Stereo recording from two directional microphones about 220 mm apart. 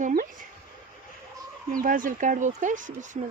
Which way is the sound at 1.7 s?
40° right (ahead or behind).